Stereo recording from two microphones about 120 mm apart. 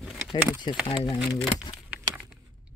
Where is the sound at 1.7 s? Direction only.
45° left (ahead or behind).